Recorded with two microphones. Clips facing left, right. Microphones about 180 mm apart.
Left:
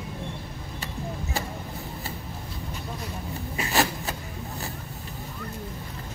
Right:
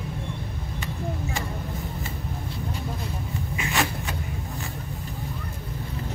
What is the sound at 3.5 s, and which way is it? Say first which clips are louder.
Rub: left 2 dB; 40° left (ahead or behind).